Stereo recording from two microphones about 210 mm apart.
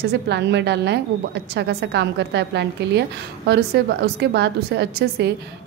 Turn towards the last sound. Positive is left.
turn(degrees=-55)  # may be behind; listen again after turning